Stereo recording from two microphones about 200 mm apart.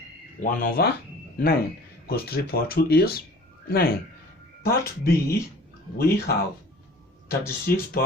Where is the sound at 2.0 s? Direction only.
50° left (ahead or behind).